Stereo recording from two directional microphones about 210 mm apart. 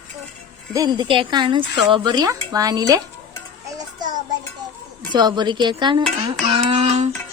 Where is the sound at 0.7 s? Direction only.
20° right (ahead or behind).